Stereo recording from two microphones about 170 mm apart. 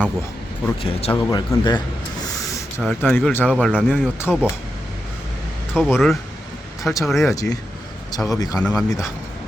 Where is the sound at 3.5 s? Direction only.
5° right (ahead or behind).